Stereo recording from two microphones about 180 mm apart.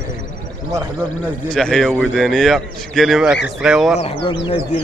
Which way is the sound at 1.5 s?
5° left (ahead or behind).